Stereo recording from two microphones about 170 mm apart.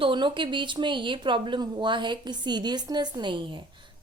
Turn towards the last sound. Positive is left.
turn(degrees=-30)  # may be behind; listen again after turning